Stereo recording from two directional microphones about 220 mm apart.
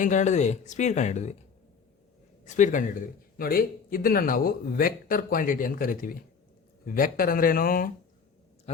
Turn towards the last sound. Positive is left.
turn(degrees=40)  # may be behind; listen again after turning